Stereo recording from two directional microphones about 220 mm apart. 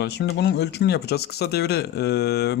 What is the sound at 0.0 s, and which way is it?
Speech, 50° left (ahead or behind).